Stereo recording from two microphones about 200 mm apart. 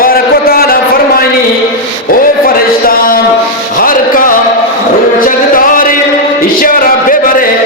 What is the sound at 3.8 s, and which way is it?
Music, 45° left (ahead or behind).